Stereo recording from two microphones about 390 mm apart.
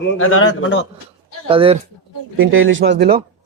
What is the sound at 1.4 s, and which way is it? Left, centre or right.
Speech, centre.